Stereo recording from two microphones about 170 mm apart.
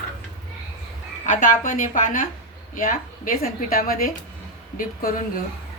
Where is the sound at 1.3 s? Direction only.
50° left (ahead or behind).